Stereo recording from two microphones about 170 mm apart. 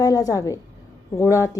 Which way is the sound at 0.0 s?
20° left (ahead or behind).